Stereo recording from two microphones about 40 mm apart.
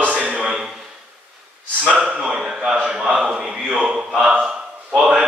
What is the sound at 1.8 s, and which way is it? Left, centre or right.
Speech, right.